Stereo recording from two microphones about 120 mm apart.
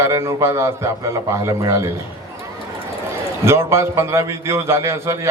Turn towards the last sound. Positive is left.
turn(degrees=-25)  # may be behind; listen again after turning